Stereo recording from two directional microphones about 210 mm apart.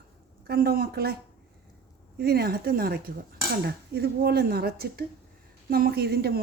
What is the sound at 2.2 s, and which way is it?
Speech, 50° right (ahead or behind).